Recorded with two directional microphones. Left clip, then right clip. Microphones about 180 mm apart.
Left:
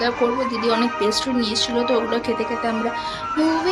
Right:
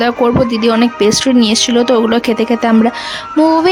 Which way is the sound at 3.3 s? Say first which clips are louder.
Right 11 dB; centre (ahead or behind).